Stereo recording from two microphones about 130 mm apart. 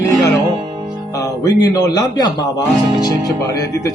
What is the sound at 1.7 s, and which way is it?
Speech, 30° left (ahead or behind).